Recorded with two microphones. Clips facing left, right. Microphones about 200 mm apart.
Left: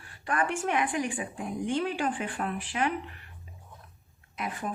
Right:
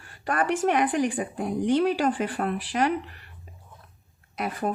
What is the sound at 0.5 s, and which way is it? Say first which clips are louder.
Speech: right 6 dB; 40° right (ahead or behind).